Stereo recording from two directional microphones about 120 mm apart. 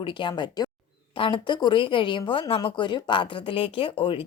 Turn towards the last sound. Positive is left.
turn(degrees=50)  # may be behind; listen again after turning